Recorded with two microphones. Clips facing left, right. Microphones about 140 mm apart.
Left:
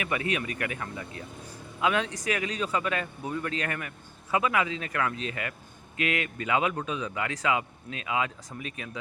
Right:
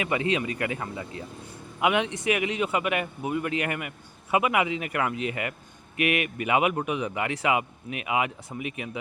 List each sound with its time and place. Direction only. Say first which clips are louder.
0.0 s speech: right 4 dB; 25° right (ahead or behind)